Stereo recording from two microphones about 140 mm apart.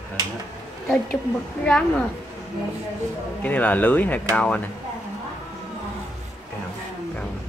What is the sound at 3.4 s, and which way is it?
Speech, 10° left (ahead or behind).